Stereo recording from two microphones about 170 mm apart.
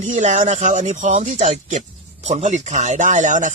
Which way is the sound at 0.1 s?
45° right (ahead or behind).